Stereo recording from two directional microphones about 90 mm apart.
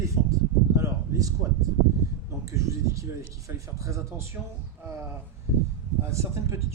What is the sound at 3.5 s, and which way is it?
Speech, 35° right (ahead or behind).